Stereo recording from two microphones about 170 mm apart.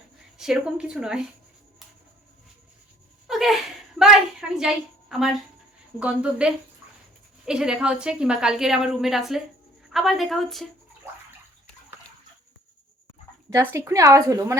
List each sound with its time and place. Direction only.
0.3 s a woman's voice: 5° right (ahead or behind)
3.2 s a sound: centre (ahead or behind)
6.0 s a woman's voice: 5° right (ahead or behind)
13.5 s speech: 15° right (ahead or behind)